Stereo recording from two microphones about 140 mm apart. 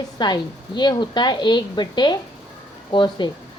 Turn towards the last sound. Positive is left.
turn(degrees=35)  # may be behind; listen again after turning